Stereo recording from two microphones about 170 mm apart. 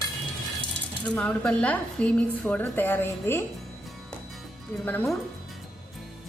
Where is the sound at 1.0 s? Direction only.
10° left (ahead or behind).